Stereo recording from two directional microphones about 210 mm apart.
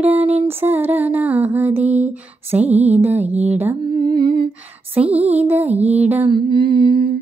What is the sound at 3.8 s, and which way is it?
Humming, 20° right (ahead or behind).